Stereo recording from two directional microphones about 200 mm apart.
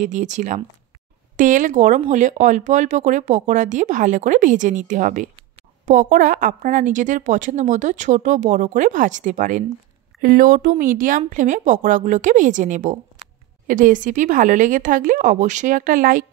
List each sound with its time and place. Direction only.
0.0 s speech: 40° right (ahead or behind)